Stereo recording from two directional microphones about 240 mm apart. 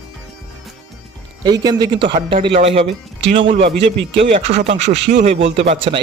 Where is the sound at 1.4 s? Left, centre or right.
Centre.